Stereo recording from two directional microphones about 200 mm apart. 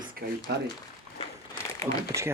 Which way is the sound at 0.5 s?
55° right (ahead or behind).